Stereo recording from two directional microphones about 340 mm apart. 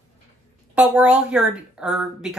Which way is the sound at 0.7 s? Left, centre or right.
Centre.